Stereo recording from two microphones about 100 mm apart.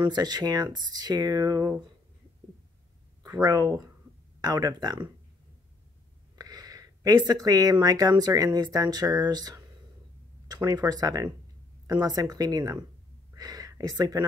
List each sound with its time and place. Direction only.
0.0 s speech: 45° right (ahead or behind)
3.3 s speech: 40° right (ahead or behind)
6.3 s speech: 40° right (ahead or behind)
13.3 s a sound: 35° right (ahead or behind)